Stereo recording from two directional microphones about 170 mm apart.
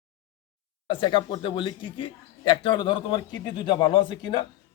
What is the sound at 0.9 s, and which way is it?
A man's voice, 25° left (ahead or behind).